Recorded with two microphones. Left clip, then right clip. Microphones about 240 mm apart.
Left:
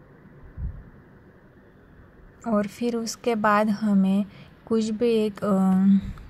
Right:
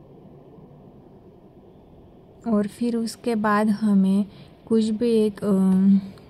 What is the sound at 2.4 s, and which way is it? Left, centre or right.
Speech, left.